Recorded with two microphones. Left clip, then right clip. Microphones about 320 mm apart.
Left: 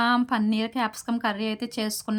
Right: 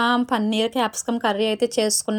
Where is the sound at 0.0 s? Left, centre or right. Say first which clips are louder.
Right 3 dB; centre.